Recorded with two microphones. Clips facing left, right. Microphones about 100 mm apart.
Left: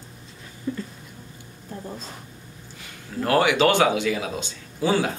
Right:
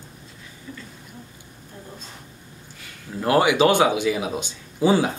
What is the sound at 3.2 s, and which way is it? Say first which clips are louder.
Speech: right 2 dB; 20° right (ahead or behind).